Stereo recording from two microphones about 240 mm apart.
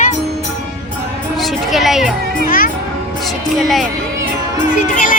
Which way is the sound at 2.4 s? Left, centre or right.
Left.